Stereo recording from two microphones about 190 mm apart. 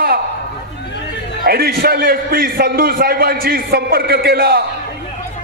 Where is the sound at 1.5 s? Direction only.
55° right (ahead or behind).